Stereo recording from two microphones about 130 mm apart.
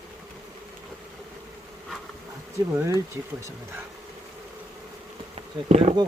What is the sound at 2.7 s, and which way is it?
Speech, 20° right (ahead or behind).